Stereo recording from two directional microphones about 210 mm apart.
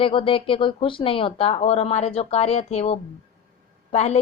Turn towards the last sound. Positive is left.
turn(degrees=30)  # may be behind; listen again after turning